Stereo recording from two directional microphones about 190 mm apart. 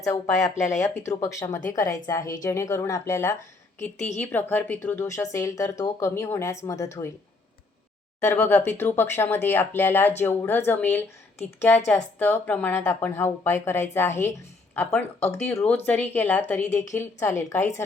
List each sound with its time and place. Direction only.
0.0 s speech: 15° left (ahead or behind)
3.9 s a woman's voice: 40° left (ahead or behind)
4.2 s speech: 10° left (ahead or behind)
8.2 s speech: 10° left (ahead or behind)